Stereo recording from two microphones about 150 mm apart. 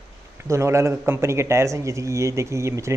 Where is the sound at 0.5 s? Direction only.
20° right (ahead or behind).